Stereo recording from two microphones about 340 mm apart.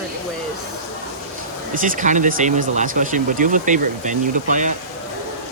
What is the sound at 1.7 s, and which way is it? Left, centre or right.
Speech, right.